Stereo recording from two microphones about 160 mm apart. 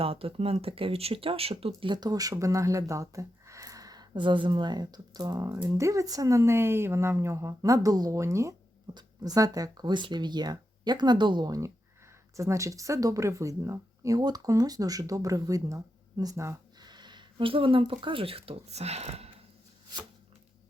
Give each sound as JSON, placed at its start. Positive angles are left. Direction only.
{"t": 0.0, "sound": "speech", "side_deg": -35}